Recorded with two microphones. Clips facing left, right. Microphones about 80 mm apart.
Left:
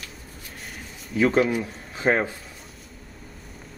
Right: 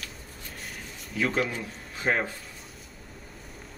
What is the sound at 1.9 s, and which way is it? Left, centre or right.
Speech, left.